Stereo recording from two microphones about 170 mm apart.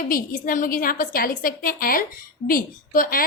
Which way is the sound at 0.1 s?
55° left (ahead or behind).